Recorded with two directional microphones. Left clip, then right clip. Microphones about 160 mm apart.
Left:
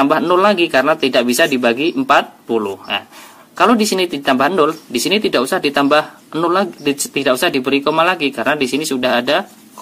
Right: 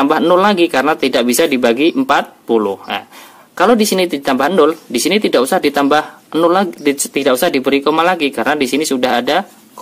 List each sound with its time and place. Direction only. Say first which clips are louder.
0.0 s speech: right 1 dB; 40° right (ahead or behind)